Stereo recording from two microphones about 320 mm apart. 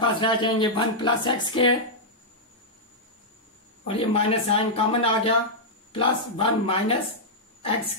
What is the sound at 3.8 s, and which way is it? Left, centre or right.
Speech, centre.